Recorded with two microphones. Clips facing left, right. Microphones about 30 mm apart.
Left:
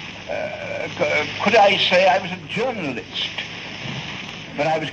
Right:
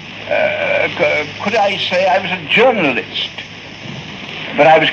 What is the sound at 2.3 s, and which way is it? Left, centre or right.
Speech, right.